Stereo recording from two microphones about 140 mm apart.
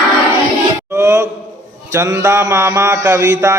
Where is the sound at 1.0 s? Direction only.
20° right (ahead or behind).